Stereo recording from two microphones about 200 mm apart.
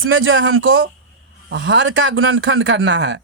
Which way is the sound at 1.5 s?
65° right (ahead or behind).